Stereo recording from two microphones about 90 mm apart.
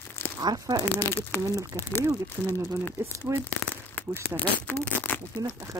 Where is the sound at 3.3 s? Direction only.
35° right (ahead or behind).